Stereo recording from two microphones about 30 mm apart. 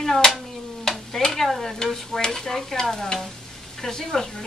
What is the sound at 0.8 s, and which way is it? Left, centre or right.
Stir, centre.